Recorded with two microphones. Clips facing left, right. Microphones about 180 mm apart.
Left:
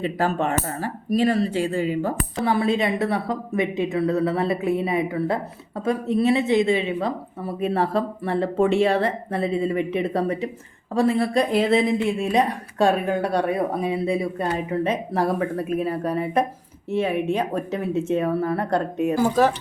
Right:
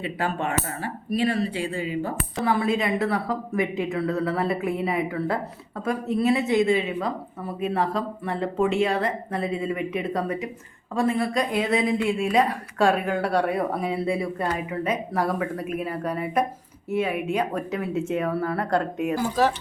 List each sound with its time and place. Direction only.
0.0 s speech: 40° left (ahead or behind)
2.4 s a woman's voice: 30° left (ahead or behind)